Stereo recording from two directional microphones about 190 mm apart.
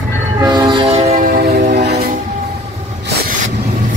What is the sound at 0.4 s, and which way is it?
Train horn, 20° right (ahead or behind).